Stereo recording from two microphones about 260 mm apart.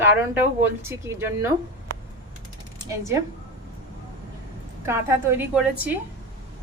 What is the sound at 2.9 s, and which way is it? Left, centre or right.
Speech, centre.